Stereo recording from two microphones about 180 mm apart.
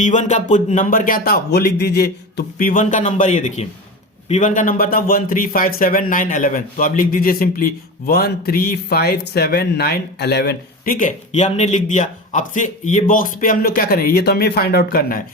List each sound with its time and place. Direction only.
0.0 s speech: 45° left (ahead or behind); by 15.2 s 60° left (ahead or behind)